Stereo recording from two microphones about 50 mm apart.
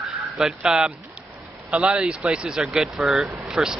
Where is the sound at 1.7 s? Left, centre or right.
Right.